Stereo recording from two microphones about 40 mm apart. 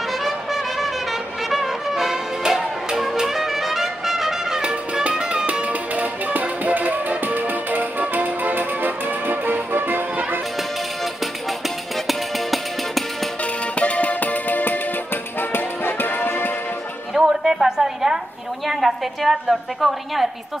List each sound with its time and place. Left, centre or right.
0.2 s trumpet: centre
1.5 s music: centre
2.4 s music: centre
3.0 s music: centre
4.6 s music: right
5.5 s music: right
12.1 s music: centre
13.7 s music: left
15.5 s music: left
17.1 s a sound: centre
18.7 s a woman's voice: centre